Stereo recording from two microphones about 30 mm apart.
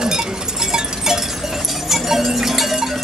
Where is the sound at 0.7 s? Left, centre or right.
Centre.